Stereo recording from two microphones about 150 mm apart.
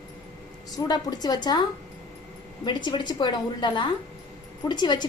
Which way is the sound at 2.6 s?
30° left (ahead or behind).